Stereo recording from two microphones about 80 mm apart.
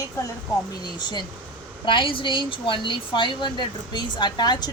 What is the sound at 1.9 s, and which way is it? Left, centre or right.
A woman's voice, left.